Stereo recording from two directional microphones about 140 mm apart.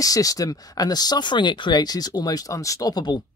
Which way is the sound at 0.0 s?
25° left (ahead or behind).